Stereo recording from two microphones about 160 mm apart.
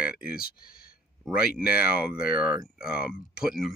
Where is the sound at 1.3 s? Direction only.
5° right (ahead or behind).